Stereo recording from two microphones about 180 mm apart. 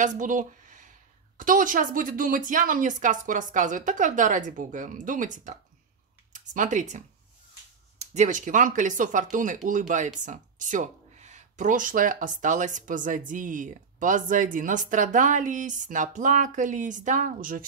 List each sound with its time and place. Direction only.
0.0 s speech: 45° right (ahead or behind)
8.0 s speech: 40° right (ahead or behind)